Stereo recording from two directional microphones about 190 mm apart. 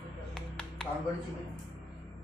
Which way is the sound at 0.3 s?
5° left (ahead or behind).